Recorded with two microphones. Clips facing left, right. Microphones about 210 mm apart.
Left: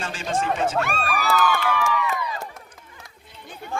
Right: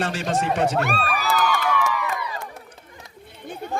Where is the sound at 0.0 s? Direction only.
65° right (ahead or behind).